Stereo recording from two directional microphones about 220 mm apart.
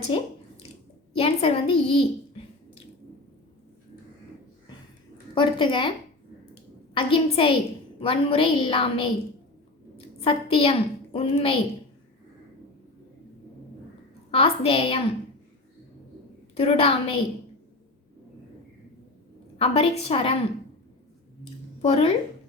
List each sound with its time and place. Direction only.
0.1 s a woman's voice: 25° left (ahead or behind)
5.3 s a woman's voice: 20° left (ahead or behind)
6.9 s a woman's voice: 25° left (ahead or behind)
10.2 s a woman's voice: 25° left (ahead or behind)
14.3 s a woman's voice: 25° left (ahead or behind)
16.6 s a woman's voice: 25° left (ahead or behind)
19.5 s a woman's voice: 25° left (ahead or behind)
21.8 s speech: 25° left (ahead or behind)